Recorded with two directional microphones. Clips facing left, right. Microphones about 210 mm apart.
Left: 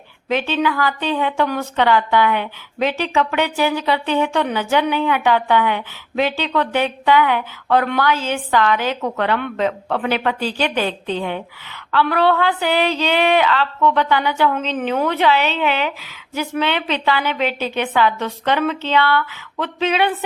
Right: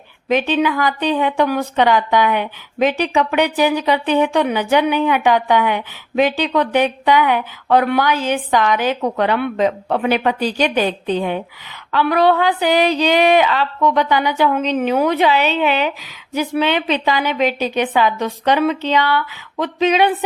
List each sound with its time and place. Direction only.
0.3 s a woman's voice: 15° right (ahead or behind)